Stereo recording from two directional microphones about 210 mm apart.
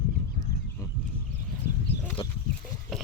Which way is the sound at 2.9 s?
Centre (ahead or behind).